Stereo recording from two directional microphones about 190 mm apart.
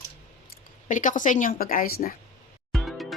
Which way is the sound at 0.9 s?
40° left (ahead or behind).